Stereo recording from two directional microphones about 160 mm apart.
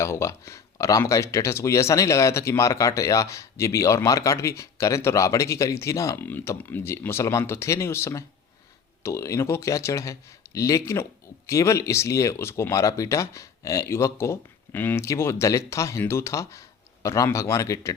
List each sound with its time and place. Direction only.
0.0 s speech: 15° left (ahead or behind)